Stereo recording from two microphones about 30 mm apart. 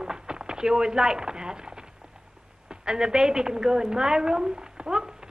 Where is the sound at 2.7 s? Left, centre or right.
Right.